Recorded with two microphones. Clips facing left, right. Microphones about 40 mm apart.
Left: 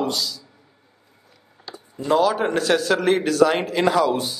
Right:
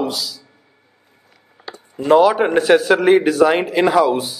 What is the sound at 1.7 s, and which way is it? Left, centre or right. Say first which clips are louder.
Speech: right 7 dB; right.